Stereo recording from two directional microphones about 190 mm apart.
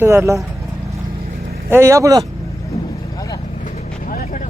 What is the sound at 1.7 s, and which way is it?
Speech, 15° right (ahead or behind).